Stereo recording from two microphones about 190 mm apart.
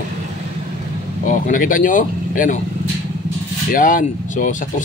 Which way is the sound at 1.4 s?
45° left (ahead or behind).